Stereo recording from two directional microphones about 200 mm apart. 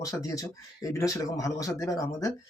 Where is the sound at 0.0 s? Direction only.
15° left (ahead or behind).